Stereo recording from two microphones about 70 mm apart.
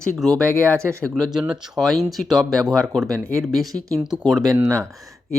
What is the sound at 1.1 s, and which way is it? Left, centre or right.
Speech, centre.